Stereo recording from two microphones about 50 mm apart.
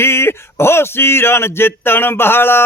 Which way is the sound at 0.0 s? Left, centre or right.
Left.